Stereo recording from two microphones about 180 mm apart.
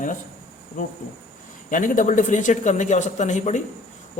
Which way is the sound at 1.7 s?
45° left (ahead or behind).